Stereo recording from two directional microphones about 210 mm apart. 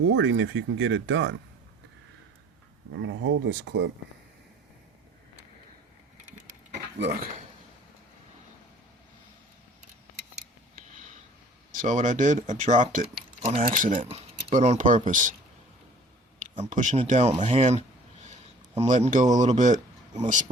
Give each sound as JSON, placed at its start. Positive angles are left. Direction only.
{"t": 0.1, "sound": "speech", "side_deg": -60}
{"t": 2.9, "sound": "speech", "side_deg": -60}
{"t": 7.0, "sound": "speech", "side_deg": -50}
{"t": 11.7, "sound": "speech", "side_deg": -35}
{"t": 13.4, "sound": "speech", "side_deg": -25}
{"t": 13.7, "sound": "speech", "side_deg": -40}
{"t": 14.0, "sound": "speech", "side_deg": -25}
{"t": 16.4, "sound": "speech", "side_deg": -35}